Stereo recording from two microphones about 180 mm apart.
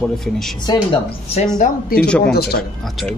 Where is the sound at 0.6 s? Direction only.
30° left (ahead or behind).